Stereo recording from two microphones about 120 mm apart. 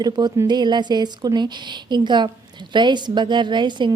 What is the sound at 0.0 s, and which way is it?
Speech, 35° right (ahead or behind).